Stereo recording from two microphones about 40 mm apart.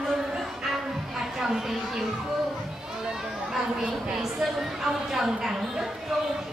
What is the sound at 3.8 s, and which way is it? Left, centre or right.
A woman's voice, centre.